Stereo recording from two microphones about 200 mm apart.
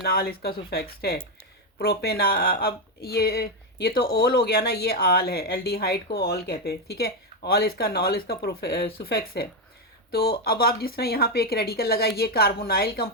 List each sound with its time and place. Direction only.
0.0 s speech: 50° left (ahead or behind)